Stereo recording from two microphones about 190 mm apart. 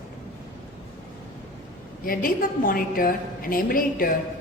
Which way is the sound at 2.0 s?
50° left (ahead or behind).